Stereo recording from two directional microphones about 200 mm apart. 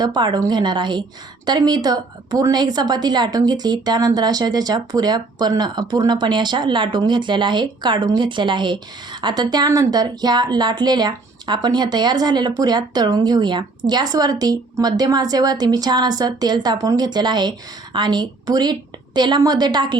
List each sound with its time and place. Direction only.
0.0 s a woman's voice: 20° right (ahead or behind)